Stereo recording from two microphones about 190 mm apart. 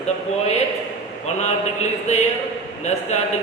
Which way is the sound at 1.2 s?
35° left (ahead or behind).